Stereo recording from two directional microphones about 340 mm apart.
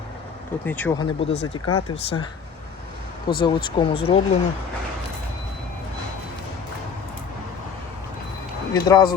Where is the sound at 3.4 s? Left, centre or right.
Centre.